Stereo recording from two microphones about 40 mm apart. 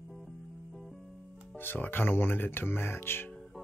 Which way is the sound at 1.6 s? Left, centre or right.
Left.